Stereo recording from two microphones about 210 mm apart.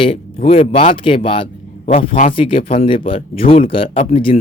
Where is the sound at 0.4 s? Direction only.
25° left (ahead or behind).